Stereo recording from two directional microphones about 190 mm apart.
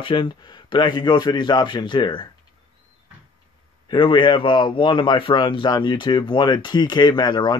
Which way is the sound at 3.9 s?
25° left (ahead or behind).